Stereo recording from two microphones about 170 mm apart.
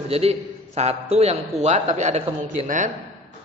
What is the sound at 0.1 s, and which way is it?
A woman's voice, 40° right (ahead or behind).